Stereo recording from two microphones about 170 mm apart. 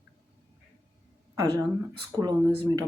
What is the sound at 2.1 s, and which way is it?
Speech, 25° right (ahead or behind).